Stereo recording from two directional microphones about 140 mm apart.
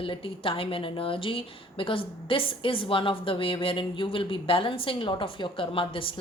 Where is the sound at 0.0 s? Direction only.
40° left (ahead or behind).